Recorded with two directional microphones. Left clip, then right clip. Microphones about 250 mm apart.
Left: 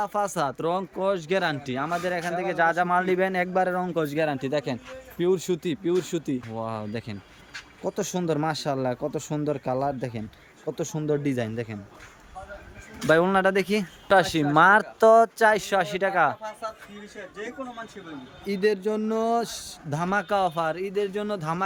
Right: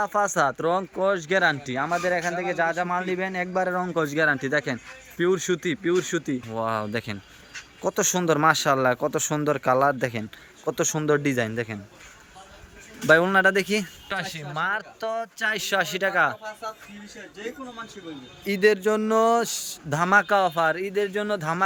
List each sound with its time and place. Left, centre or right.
0.0 s speech: centre
13.0 s speech: centre
14.1 s speech: left; by 16.6 s centre
18.4 s speech: centre